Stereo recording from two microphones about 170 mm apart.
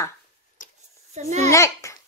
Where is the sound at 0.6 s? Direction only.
50° left (ahead or behind).